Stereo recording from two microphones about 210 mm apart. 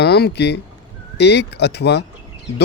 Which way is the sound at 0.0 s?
50° left (ahead or behind).